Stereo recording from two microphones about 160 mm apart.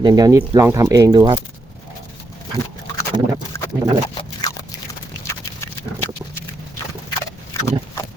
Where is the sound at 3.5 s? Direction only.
15° left (ahead or behind).